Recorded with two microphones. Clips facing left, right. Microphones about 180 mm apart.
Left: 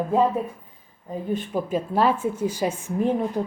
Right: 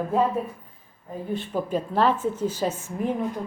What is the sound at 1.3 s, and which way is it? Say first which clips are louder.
A woman's voice: left 1 dB; 10° left (ahead or behind).